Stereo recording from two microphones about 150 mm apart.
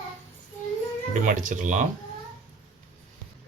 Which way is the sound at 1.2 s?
60° right (ahead or behind).